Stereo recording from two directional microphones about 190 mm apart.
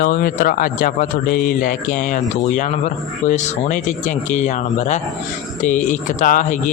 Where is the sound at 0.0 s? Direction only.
50° left (ahead or behind).